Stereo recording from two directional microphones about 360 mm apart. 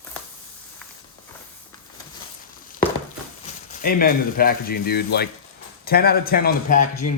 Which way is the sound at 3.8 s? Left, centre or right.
Left.